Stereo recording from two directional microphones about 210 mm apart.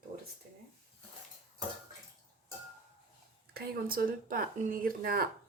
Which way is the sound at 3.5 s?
45° right (ahead or behind).